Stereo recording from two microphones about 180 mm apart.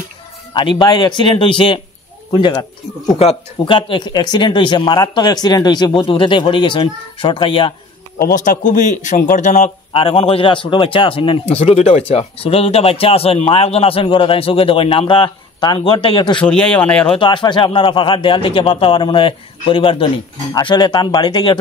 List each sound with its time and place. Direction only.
0.5 s speech: 25° left (ahead or behind)
8.2 s a man's voice: 50° left (ahead or behind); by 16.4 s 25° left (ahead or behind)
16.4 s a man's voice: 5° left (ahead or behind)
17.1 s speech: 25° left (ahead or behind)